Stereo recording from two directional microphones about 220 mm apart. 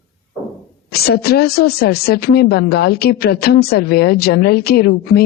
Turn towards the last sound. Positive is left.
turn(degrees=45)  # may be behind; listen again after turning